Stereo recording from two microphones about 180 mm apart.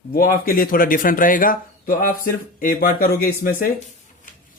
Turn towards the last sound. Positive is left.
turn(degrees=50)  # may be behind; listen again after turning